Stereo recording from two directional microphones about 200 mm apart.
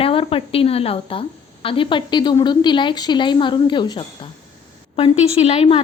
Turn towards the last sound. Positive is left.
turn(degrees=30)  # may be behind; listen again after turning